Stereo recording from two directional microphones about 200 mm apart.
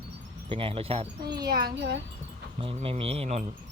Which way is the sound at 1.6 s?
55° right (ahead or behind).